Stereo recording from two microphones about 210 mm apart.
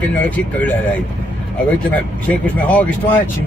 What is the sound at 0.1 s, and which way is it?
Speech, 10° left (ahead or behind).